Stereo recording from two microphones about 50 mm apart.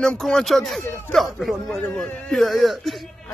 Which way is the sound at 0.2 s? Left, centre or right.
Centre.